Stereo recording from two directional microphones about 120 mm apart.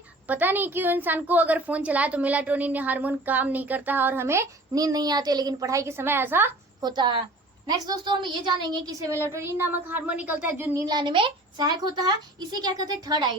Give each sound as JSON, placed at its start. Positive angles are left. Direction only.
{"t": 0.3, "sound": "a woman's voice", "side_deg": -15}
{"t": 6.8, "sound": "a woman's voice", "side_deg": -40}
{"t": 10.8, "sound": "speech", "side_deg": -40}